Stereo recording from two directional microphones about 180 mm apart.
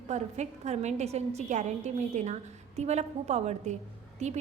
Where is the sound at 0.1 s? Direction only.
40° right (ahead or behind).